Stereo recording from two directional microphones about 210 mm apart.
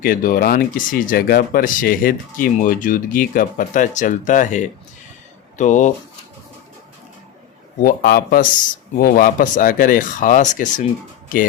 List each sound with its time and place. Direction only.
0.0 s speech: 40° left (ahead or behind)
7.8 s speech: 45° left (ahead or behind)